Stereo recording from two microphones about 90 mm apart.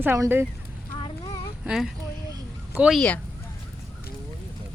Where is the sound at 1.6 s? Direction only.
5° right (ahead or behind).